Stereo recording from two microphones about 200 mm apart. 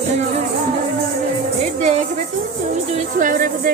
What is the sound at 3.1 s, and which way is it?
Music, 40° right (ahead or behind).